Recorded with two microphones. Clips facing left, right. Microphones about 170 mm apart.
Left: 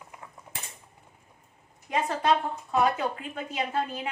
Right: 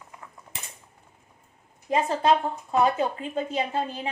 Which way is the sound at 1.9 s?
25° right (ahead or behind).